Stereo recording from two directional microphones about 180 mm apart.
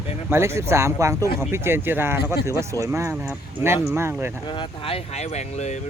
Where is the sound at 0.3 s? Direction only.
15° right (ahead or behind).